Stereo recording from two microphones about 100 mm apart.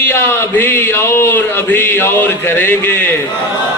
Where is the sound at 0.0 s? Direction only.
25° left (ahead or behind).